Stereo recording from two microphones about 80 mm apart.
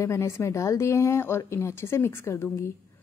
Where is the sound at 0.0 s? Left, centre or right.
Left.